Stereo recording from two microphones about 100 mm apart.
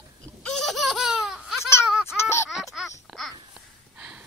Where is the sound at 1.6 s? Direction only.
25° left (ahead or behind).